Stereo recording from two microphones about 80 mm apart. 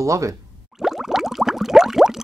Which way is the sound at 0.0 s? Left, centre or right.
Right.